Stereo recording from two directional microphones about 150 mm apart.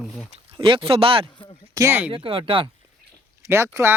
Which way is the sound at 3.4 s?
20° right (ahead or behind).